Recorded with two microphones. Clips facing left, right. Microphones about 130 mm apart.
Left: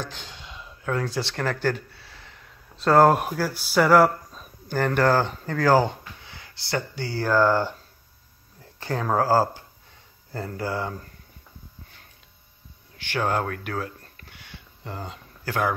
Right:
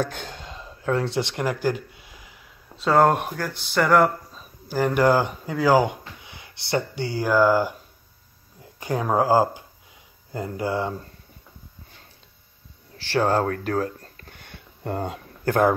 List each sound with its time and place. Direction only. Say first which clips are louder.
0.0 s speech: right 8 dB; 50° right (ahead or behind); by 7.7 s 10° right (ahead or behind)
8.7 s speech: right 2 dB; 15° right (ahead or behind)
12.9 s a sound: right 4 dB; 35° right (ahead or behind); by 15.7 s 55° right (ahead or behind)